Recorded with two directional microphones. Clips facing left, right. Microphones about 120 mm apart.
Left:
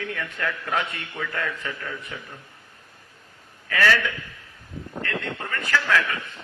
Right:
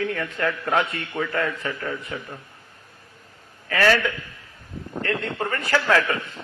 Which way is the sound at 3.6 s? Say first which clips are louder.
Right 2 dB; 40° right (ahead or behind).